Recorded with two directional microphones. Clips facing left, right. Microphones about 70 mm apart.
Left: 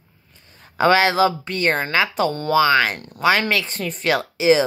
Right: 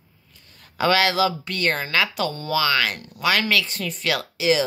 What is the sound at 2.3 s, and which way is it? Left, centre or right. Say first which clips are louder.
Speech: left 5 dB; left.